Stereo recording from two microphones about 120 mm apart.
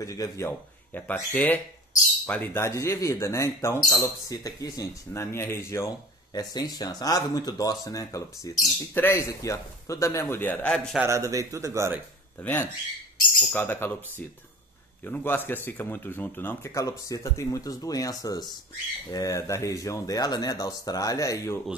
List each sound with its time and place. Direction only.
0.0 s speech: 30° left (ahead or behind)
0.5 s speech: 15° left (ahead or behind)
2.6 s speech: 25° left (ahead or behind)
10.7 s a man's voice: 5° left (ahead or behind)
11.1 s speech: 25° right (ahead or behind)
12.4 s speech: 15° left (ahead or behind)
15.0 s speech: 15° left (ahead or behind)